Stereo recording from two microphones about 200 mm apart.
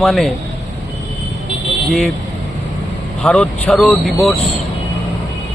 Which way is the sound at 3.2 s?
5° left (ahead or behind).